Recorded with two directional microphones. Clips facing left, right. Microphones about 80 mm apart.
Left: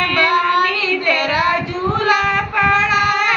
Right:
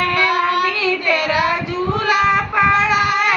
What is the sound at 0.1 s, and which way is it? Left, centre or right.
Child singing, centre.